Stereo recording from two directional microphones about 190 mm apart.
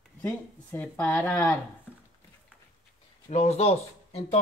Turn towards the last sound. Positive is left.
turn(degrees=35)  # may be behind; listen again after turning